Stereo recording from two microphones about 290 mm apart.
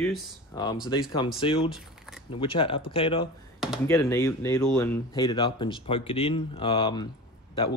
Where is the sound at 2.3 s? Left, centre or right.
Centre.